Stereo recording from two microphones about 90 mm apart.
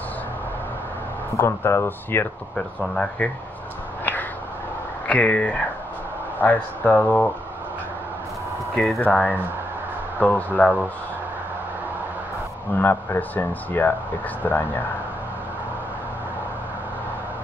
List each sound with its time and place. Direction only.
1.4 s speech: 25° left (ahead or behind)
2.8 s speech: 10° left (ahead or behind)
4.0 s a sound: 20° left (ahead or behind)
5.0 s speech: 15° left (ahead or behind)
8.7 s speech: centre (ahead or behind)
9.0 s speech: 20° left (ahead or behind)
12.7 s speech: 20° left (ahead or behind)